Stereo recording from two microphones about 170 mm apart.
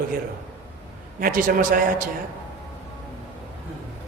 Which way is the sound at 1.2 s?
55° right (ahead or behind).